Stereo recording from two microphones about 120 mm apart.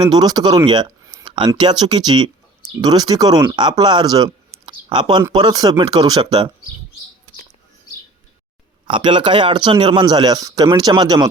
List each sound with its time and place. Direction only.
0.0 s a man's voice: 35° right (ahead or behind)
1.0 s a sound: 35° right (ahead or behind)
1.5 s a man's voice: 40° right (ahead or behind)
8.9 s a man's voice: 40° right (ahead or behind)